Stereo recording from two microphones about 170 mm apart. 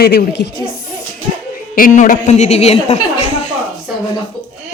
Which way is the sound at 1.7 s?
50° left (ahead or behind).